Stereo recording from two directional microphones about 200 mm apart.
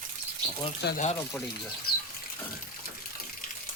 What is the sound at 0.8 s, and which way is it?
Speech, 50° left (ahead or behind).